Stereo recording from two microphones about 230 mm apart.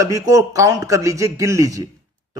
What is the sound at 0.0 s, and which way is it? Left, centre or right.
Speech, centre.